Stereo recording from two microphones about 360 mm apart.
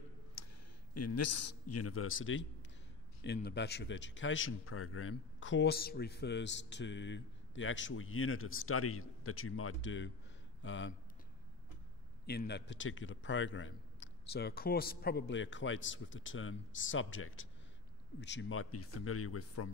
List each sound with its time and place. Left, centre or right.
0.4 s a sound: left
0.9 s a man's voice: left
12.3 s a man's voice: left